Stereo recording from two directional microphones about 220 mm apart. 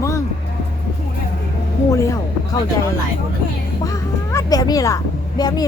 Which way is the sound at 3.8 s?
15° left (ahead or behind).